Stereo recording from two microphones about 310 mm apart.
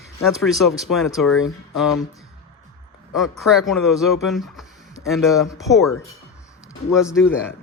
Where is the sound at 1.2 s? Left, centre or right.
Left.